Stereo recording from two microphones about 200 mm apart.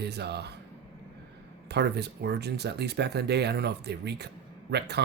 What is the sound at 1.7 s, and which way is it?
Speech, 55° right (ahead or behind).